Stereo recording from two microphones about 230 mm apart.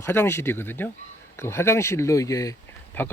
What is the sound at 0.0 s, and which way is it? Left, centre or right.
Speech, centre.